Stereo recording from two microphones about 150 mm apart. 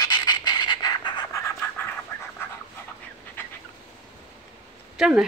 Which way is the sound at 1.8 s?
15° left (ahead or behind).